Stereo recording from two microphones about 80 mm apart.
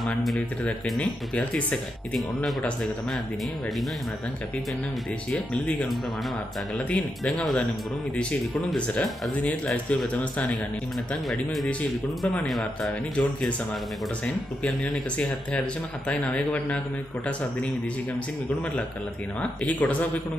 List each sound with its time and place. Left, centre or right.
0.0 s speech: centre
1.3 s speech: centre
5.3 s speech: centre
6.9 s speech: centre
11.2 s speech: centre
13.1 s speech: centre
15.1 s speech: centre
19.6 s speech: centre